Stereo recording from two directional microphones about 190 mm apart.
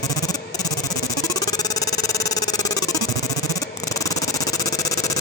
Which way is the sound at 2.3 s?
20° left (ahead or behind).